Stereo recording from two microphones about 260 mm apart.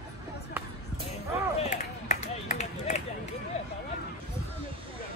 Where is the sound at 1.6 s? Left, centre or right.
Left.